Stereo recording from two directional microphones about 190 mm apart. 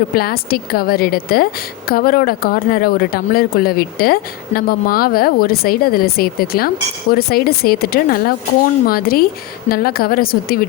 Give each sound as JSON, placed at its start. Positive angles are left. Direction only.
{"t": 0.1, "sound": "speech", "side_deg": 50}